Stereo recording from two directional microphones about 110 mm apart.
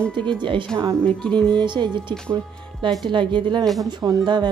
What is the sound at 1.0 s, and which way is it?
Speech, 10° left (ahead or behind).